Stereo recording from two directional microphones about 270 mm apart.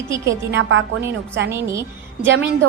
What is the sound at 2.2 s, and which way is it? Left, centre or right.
Speech, right.